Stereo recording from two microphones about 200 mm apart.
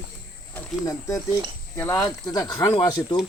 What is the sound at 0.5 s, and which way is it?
Speech, 15° left (ahead or behind).